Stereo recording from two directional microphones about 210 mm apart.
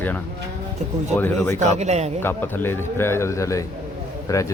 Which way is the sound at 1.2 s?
10° left (ahead or behind).